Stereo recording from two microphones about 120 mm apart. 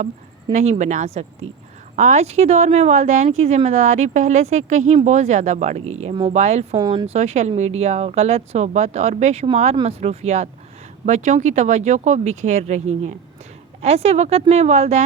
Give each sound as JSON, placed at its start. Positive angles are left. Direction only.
{"t": 0.5, "sound": "speech", "side_deg": -70}
{"t": 3.2, "sound": "speech", "side_deg": -65}
{"t": 6.7, "sound": "speech", "side_deg": -40}
{"t": 7.1, "sound": "speech", "side_deg": -70}
{"t": 9.8, "sound": "speech", "side_deg": -60}
{"t": 11.0, "sound": "speech", "side_deg": -80}